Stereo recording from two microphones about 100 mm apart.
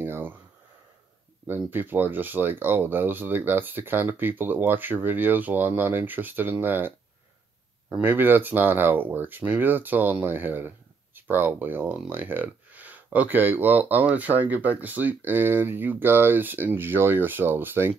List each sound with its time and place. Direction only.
0.0 s a sound: 20° right (ahead or behind)
1.5 s speech: 20° right (ahead or behind)
8.0 s speech: 20° right (ahead or behind)